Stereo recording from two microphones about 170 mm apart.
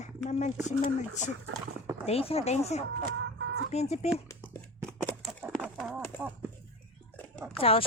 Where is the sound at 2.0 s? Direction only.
35° left (ahead or behind).